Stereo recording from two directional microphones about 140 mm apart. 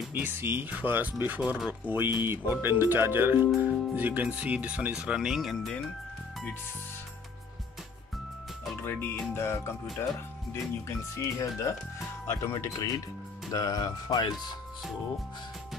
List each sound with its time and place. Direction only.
0.1 s speech: 15° right (ahead or behind); by 5.8 s centre (ahead or behind)
8.8 s speech: 15° left (ahead or behind)